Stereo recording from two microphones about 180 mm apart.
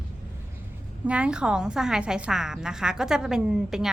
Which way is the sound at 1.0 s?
5° right (ahead or behind).